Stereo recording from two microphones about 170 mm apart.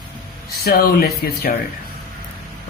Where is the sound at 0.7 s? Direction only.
60° left (ahead or behind).